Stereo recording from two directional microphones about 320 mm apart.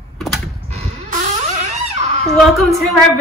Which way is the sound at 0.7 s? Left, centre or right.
Right.